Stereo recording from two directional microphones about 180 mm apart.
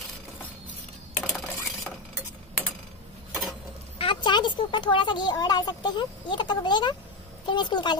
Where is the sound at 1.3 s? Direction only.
Centre (ahead or behind).